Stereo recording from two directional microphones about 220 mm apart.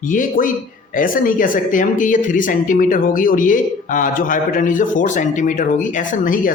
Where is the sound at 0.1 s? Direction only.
35° left (ahead or behind).